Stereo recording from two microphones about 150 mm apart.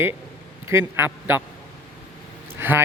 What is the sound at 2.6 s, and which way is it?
Speech, 15° right (ahead or behind).